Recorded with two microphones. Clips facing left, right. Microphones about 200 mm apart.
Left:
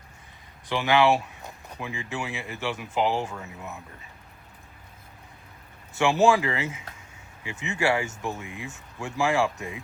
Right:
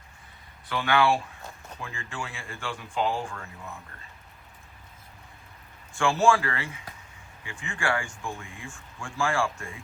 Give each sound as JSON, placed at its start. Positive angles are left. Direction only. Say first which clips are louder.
{"t": 0.7, "sound": "speech", "louder": "left 3 dB", "side_deg": 20}
{"t": 5.9, "sound": "speech", "louder": "left 2 dB", "side_deg": 20}